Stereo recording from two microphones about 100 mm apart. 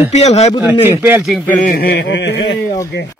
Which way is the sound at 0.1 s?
90° left.